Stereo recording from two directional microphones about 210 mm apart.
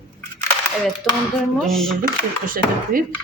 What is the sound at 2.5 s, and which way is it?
Speech, 40° right (ahead or behind).